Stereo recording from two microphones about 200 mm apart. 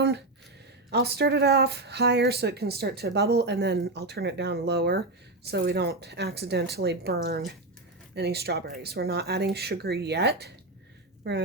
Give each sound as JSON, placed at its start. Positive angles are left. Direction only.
{"t": 0.9, "sound": "speech", "side_deg": -55}